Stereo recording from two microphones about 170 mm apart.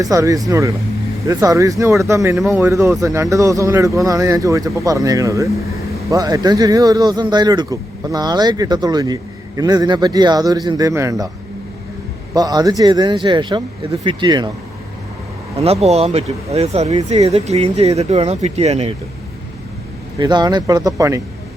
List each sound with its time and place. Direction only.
0.0 s a man's voice: 20° right (ahead or behind)
12.3 s a man's voice: 20° right (ahead or behind)
15.5 s speech: 35° right (ahead or behind)
20.1 s a man's voice: 25° right (ahead or behind)